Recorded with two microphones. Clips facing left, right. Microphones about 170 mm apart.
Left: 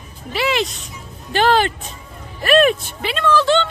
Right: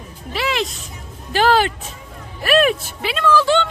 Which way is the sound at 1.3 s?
5° right (ahead or behind).